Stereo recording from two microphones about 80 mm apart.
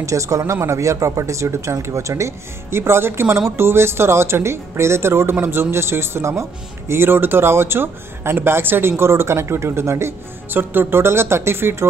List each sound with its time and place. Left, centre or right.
0.0 s speech: right